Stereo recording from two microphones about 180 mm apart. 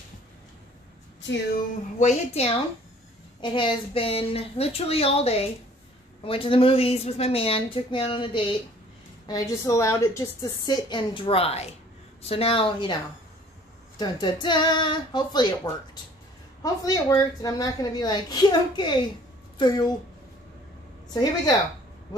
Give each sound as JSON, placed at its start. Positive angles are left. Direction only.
{"t": 2.0, "sound": "a woman's voice", "side_deg": 40}
{"t": 9.3, "sound": "a woman's voice", "side_deg": 15}
{"t": 13.9, "sound": "a woman's voice", "side_deg": 25}
{"t": 21.1, "sound": "a woman's voice", "side_deg": 20}